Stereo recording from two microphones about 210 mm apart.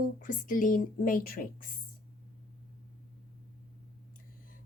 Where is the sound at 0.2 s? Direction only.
40° left (ahead or behind).